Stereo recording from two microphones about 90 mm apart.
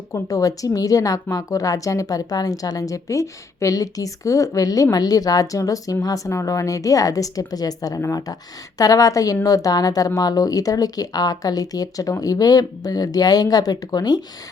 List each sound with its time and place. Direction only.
0.1 s a woman's voice: 40° left (ahead or behind)